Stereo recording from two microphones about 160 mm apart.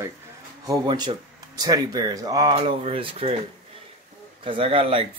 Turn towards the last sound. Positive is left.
turn(degrees=-35)  # may be behind; listen again after turning